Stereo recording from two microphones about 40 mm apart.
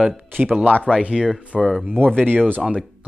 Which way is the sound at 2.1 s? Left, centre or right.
Right.